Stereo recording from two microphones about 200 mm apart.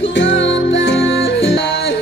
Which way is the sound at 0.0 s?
65° left (ahead or behind).